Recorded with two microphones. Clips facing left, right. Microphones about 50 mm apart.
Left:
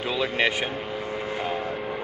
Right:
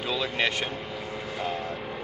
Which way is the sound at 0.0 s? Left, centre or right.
Centre.